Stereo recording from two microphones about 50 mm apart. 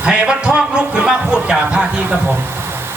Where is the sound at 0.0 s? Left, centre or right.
Right.